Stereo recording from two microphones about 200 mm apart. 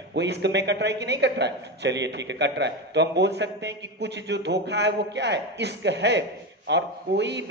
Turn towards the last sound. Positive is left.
turn(degrees=-60)  # may be behind; listen again after turning